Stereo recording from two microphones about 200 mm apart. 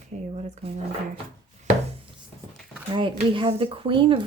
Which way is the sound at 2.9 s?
25° right (ahead or behind).